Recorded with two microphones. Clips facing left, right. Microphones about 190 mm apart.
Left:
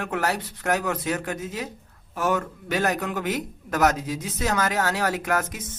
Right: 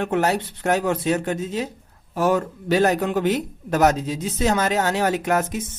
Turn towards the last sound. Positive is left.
turn(degrees=-25)  # may be behind; listen again after turning